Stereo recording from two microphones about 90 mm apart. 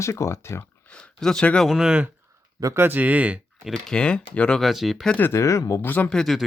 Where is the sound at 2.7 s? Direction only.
25° right (ahead or behind).